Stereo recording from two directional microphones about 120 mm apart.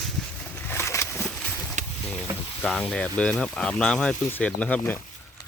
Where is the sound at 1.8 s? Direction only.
90° right.